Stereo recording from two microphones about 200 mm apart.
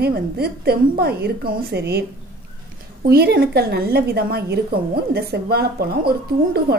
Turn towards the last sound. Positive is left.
turn(degrees=-50)  # may be behind; listen again after turning